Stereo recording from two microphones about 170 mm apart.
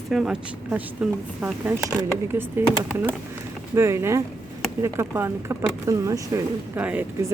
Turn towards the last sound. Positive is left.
turn(degrees=-15)  # may be behind; listen again after turning